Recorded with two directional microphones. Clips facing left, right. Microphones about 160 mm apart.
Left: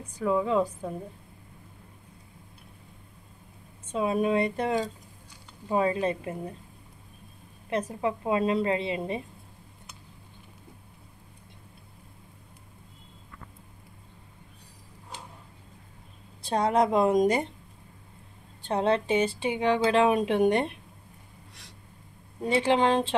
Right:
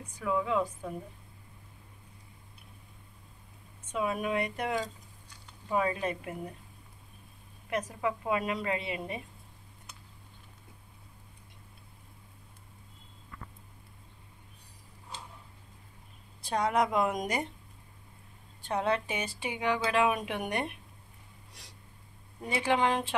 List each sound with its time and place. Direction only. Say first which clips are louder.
0.2 s a woman's voice: left 5 dB; 30° left (ahead or behind)
3.8 s speech: left 6 dB; 30° left (ahead or behind)
7.7 s speech: left 4 dB; 30° left (ahead or behind)
16.4 s speech: left 4 dB; 30° left (ahead or behind)
18.6 s speech: left 5 dB; 30° left (ahead or behind)
22.4 s speech: left 5 dB; 25° left (ahead or behind)